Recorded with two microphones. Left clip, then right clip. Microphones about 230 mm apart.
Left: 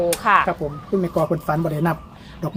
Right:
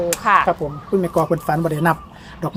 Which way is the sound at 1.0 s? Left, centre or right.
Right.